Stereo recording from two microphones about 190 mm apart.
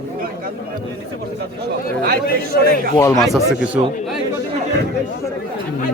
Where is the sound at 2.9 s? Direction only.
15° left (ahead or behind).